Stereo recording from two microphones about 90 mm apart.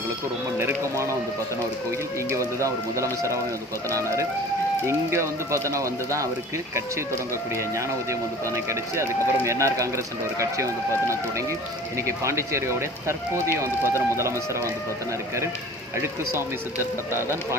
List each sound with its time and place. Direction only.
0.6 s speech: 30° right (ahead or behind)
2.3 s speech: 35° right (ahead or behind)
8.5 s speech: 35° right (ahead or behind)
17.2 s speech: 30° right (ahead or behind)